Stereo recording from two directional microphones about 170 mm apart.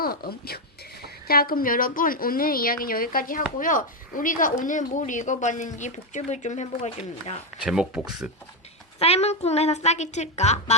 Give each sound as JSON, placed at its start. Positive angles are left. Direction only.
{"t": 0.0, "sound": "a woman's voice", "side_deg": 65}
{"t": 7.6, "sound": "speech", "side_deg": -5}
{"t": 9.0, "sound": "a woman's voice", "side_deg": 35}